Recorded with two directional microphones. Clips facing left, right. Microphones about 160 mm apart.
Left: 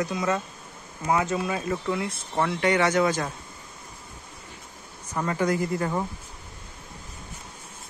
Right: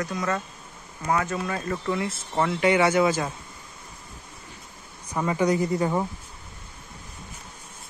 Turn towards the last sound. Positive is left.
turn(degrees=-15)  # may be behind; listen again after turning